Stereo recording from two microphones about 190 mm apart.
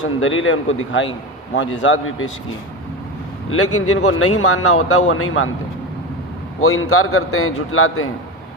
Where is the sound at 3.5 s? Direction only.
90° left.